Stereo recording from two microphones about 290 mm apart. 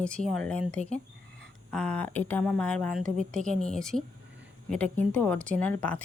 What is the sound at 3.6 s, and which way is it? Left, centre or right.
Speech, centre.